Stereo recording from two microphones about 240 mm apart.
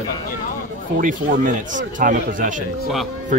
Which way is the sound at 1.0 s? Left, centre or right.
Right.